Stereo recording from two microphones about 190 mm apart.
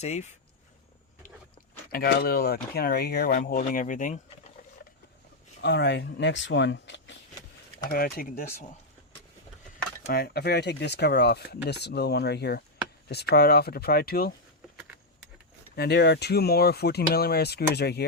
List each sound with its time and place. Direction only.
0.0 s speech: 35° left (ahead or behind)
1.9 s speech: 50° left (ahead or behind)
5.6 s speech: 65° left (ahead or behind)
7.9 s speech: 55° left (ahead or behind)
10.1 s speech: 55° left (ahead or behind)
15.7 s speech: 60° left (ahead or behind)